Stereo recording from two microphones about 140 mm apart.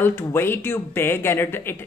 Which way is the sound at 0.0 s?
15° left (ahead or behind).